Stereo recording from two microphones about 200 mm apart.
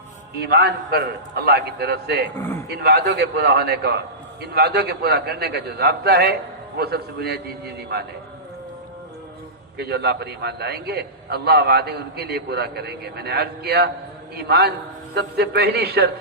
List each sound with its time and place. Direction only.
0.3 s a man's voice: 55° right (ahead or behind)
9.7 s a man's voice: 55° right (ahead or behind)